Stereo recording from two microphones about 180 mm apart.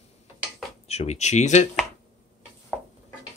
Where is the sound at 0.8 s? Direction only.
35° left (ahead or behind).